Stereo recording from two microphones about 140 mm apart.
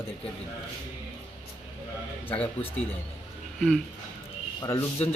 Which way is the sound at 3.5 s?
Centre (ahead or behind).